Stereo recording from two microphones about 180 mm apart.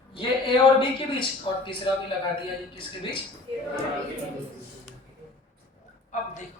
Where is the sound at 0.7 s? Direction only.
30° left (ahead or behind).